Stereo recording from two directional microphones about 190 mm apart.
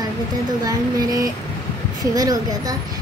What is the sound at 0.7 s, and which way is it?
A child's voice, 20° right (ahead or behind).